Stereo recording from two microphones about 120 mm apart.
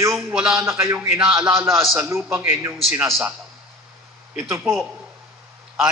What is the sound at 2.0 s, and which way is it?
Speech, 20° right (ahead or behind).